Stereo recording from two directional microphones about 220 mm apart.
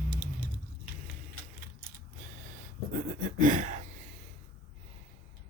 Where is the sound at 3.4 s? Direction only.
35° right (ahead or behind).